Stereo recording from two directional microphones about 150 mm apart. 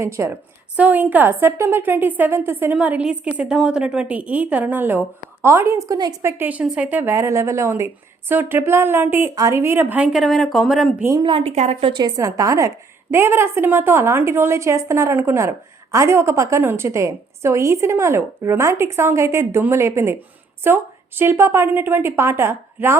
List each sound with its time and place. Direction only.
0.0 s a woman's voice: 20° right (ahead or behind); by 11.0 s centre (ahead or behind)
11.2 s a woman's voice: 35° right (ahead or behind)
11.5 s a woman's voice: 50° right (ahead or behind); by 23.0 s 15° right (ahead or behind)